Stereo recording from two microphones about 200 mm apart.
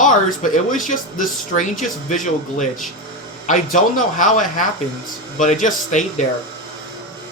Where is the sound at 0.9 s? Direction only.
40° left (ahead or behind).